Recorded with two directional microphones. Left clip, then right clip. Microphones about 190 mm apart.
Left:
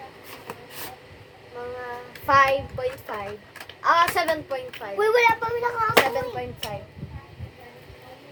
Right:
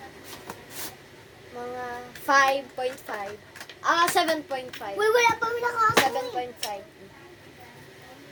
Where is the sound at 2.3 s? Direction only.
15° right (ahead or behind).